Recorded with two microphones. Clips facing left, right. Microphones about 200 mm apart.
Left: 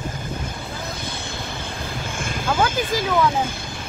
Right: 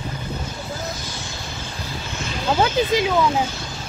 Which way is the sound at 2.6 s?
20° right (ahead or behind).